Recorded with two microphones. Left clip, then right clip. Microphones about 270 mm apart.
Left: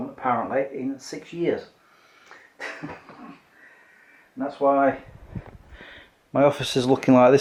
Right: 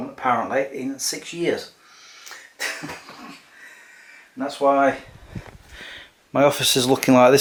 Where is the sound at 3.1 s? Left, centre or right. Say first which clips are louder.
Right 4 dB; centre.